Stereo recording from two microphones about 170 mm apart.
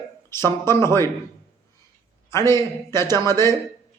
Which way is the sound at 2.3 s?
15° left (ahead or behind).